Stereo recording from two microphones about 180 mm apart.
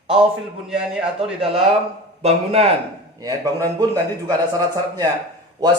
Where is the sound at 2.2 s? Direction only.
35° right (ahead or behind).